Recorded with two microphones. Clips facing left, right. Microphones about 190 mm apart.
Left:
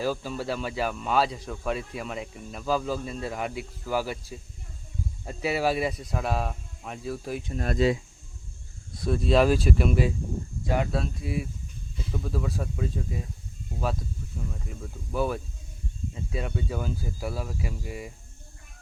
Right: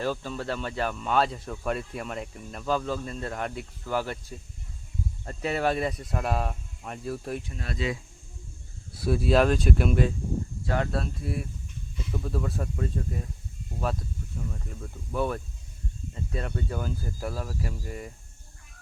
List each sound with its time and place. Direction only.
0.0 s speech: 5° left (ahead or behind)
7.5 s speech: 45° left (ahead or behind)
8.9 s speech: 5° right (ahead or behind)
11.2 s speech: 5° left (ahead or behind)
14.3 s speech: centre (ahead or behind)